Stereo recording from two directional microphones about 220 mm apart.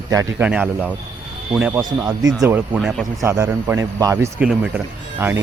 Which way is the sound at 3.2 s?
10° right (ahead or behind).